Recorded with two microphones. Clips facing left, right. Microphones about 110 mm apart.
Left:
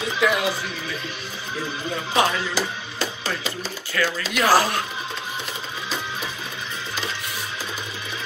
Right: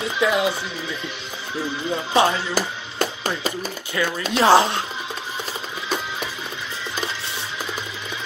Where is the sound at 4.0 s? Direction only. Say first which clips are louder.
Right 3 dB; 20° right (ahead or behind).